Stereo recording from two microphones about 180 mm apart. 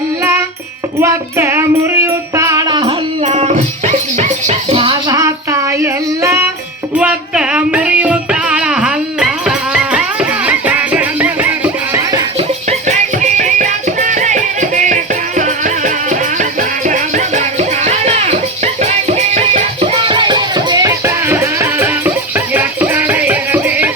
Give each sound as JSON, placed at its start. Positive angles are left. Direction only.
{"t": 0.2, "sound": "music", "side_deg": -15}
{"t": 3.2, "sound": "dog", "side_deg": -40}
{"t": 4.2, "sound": "music", "side_deg": -35}
{"t": 12.4, "sound": "music", "side_deg": -40}